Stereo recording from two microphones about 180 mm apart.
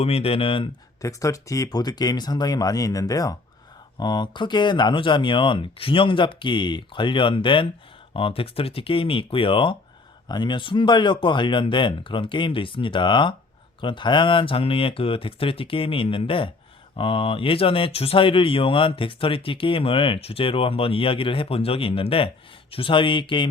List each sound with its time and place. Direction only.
0.0 s speech: 35° left (ahead or behind)
1.0 s speech: 15° left (ahead or behind)